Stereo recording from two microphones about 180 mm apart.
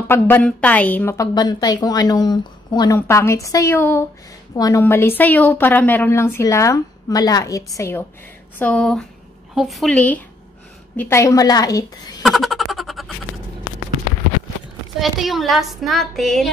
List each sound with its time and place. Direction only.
0.1 s a woman's voice: 10° left (ahead or behind)
8.5 s a woman's voice: 5° left (ahead or behind)
12.2 s a sound: centre (ahead or behind)
15.0 s a woman's voice: centre (ahead or behind)